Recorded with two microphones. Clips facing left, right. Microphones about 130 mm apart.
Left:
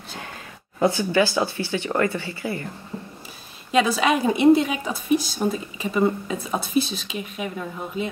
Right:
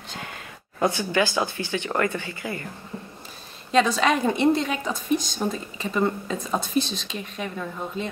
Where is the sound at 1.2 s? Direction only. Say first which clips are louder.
Left 2 dB; 20° right (ahead or behind).